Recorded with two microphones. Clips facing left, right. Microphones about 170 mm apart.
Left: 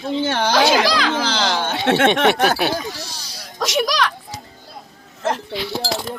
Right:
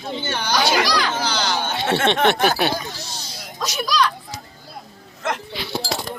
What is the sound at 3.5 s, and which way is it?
Speech, 90° left.